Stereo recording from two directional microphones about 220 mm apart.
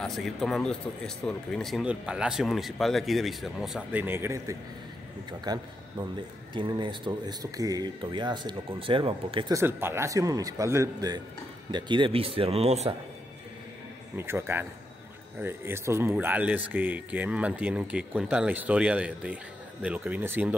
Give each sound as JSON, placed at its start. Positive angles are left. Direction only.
{"t": 0.0, "sound": "speech", "side_deg": 0}
{"t": 14.1, "sound": "speech", "side_deg": -10}